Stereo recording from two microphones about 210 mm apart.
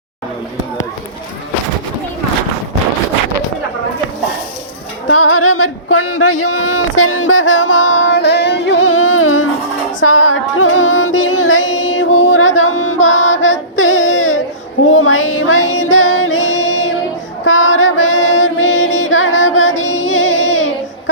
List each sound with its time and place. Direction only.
5.0 s music: 75° left (ahead or behind)
6.4 s a sound: 85° left
10.0 s music: 70° left (ahead or behind)
14.8 s child singing: 65° left (ahead or behind)
16.1 s music: 65° left (ahead or behind)